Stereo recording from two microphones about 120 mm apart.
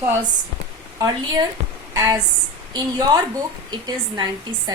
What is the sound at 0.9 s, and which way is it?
A woman's voice, 30° right (ahead or behind).